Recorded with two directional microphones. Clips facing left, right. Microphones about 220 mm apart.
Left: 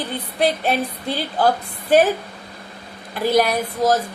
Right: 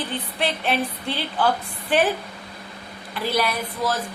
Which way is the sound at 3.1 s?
45° left (ahead or behind).